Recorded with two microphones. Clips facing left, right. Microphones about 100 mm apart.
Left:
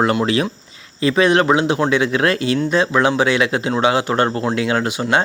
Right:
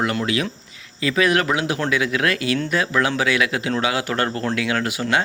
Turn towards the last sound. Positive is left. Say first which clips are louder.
# left 4 dB
turn(degrees=25)  # may be behind; listen again after turning